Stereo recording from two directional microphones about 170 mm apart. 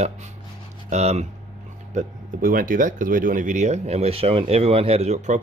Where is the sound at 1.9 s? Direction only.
50° right (ahead or behind).